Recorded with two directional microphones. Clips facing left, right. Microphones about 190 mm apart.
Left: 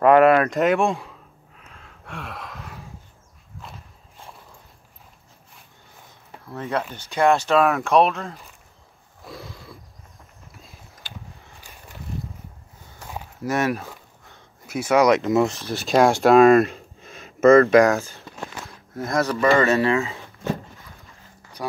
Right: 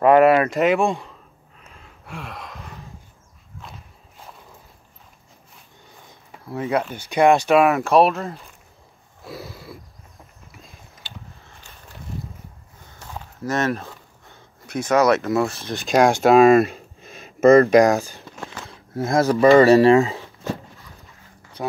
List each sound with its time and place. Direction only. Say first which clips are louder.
0.2 s speech: right 1 dB; 5° right (ahead or behind)
1.6 s gasp: right 1 dB; centre (ahead or behind)
6.5 s speech: right 4 dB; 10° right (ahead or behind)
9.2 s a sound: right 3 dB; 5° right (ahead or behind)
13.1 s a sound: even; 10° left (ahead or behind)
14.7 s speech: even; 10° left (ahead or behind)
15.7 s speech: right 1 dB; 5° left (ahead or behind)
17.5 s speech: right 1 dB; 15° right (ahead or behind)
18.9 s speech: right 5 dB; 25° right (ahead or behind)
21.6 s speech: right 2 dB; 20° right (ahead or behind)